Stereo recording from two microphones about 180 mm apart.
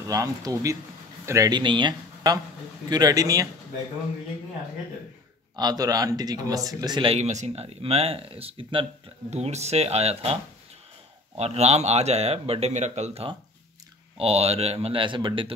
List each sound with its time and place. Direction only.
0.1 s speech: 20° right (ahead or behind)
5.6 s speech: 20° right (ahead or behind)